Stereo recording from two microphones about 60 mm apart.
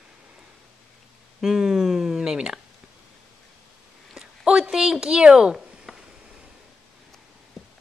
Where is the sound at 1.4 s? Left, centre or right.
Centre.